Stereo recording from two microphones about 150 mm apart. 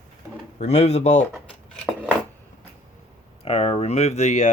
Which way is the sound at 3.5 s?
45° left (ahead or behind).